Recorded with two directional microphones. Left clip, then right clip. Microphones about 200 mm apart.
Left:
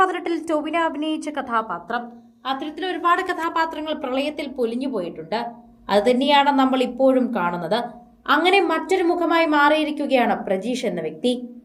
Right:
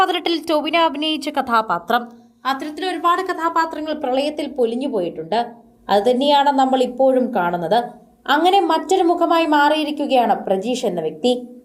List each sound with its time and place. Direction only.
0.0 s a woman's voice: 40° right (ahead or behind)
2.5 s a woman's voice: 15° right (ahead or behind)
2.7 s a woman's voice: 30° right (ahead or behind)
3.2 s a woman's voice: 5° left (ahead or behind)